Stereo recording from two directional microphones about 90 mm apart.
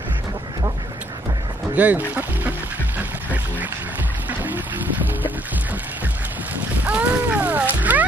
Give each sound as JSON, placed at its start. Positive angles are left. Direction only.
{"t": 1.8, "sound": "speech", "side_deg": -20}
{"t": 3.0, "sound": "duck", "side_deg": -20}
{"t": 4.3, "sound": "music", "side_deg": -20}
{"t": 6.8, "sound": "a sound", "side_deg": -15}